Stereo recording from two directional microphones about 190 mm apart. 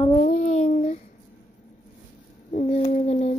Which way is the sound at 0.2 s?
40° left (ahead or behind).